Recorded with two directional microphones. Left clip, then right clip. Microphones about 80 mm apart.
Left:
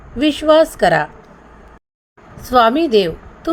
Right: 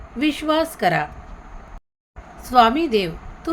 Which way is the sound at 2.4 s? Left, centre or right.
Left.